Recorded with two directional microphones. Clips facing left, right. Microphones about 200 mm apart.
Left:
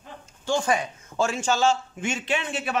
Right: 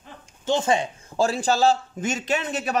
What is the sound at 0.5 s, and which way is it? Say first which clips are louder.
A man's voice: right 2 dB; 25° right (ahead or behind).